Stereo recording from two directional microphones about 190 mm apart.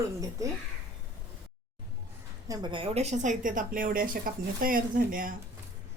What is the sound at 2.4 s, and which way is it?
A woman's voice, 20° right (ahead or behind).